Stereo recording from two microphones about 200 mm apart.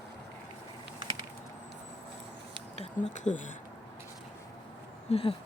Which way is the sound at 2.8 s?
35° left (ahead or behind).